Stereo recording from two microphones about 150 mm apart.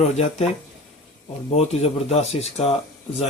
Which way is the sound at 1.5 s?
45° left (ahead or behind).